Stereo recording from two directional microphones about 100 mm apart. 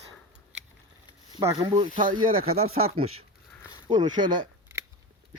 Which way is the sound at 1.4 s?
40° right (ahead or behind).